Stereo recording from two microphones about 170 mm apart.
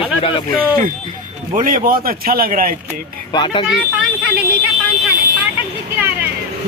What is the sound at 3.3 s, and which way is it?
Speech, 30° left (ahead or behind).